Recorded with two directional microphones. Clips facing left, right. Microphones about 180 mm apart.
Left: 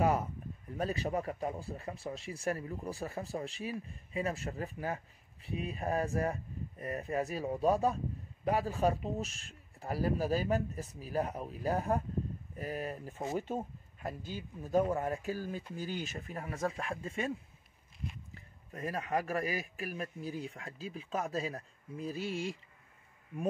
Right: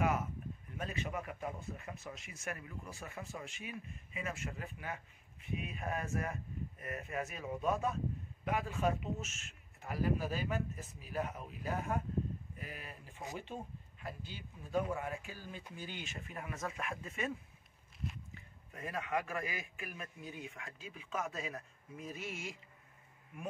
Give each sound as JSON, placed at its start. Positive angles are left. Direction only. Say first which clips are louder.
{"t": 0.0, "sound": "a sound", "louder": "left 4 dB", "side_deg": 35}
{"t": 0.7, "sound": "speech", "louder": "left 7 dB", "side_deg": 35}
{"t": 18.3, "sound": "speech", "louder": "left 5 dB", "side_deg": 35}